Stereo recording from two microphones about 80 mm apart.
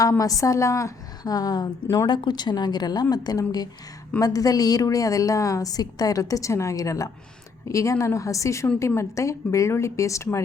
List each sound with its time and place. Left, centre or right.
0.2 s a woman's voice: left
2.0 s a woman's voice: left